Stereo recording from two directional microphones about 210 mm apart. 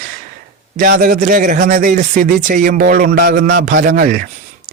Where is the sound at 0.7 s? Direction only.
45° right (ahead or behind).